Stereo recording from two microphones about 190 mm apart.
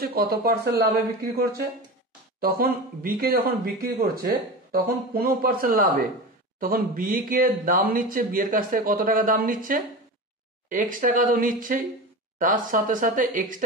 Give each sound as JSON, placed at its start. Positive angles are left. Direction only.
{"t": 0.0, "sound": "speech", "side_deg": -50}